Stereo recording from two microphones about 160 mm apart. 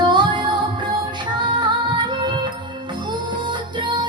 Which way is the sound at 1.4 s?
30° right (ahead or behind).